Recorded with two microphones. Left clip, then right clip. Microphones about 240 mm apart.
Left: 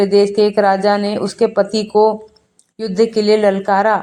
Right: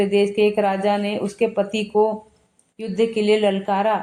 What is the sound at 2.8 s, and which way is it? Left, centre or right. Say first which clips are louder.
Speech: left 6 dB; left.